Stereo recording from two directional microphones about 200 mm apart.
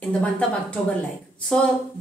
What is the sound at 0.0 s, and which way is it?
Speech, 5° left (ahead or behind).